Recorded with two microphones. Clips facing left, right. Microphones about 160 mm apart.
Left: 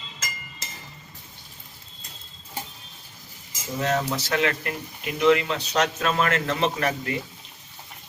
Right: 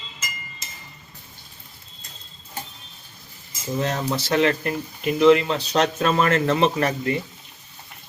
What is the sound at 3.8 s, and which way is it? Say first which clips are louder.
Speech: left 2 dB; 30° right (ahead or behind).